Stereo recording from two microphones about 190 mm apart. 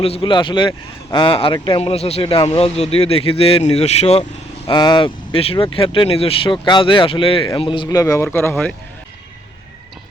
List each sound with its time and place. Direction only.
0.0 s speech: 30° left (ahead or behind); by 8.7 s 10° left (ahead or behind)